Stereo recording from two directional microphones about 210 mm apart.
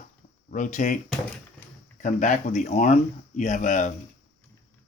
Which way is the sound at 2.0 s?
35° left (ahead or behind).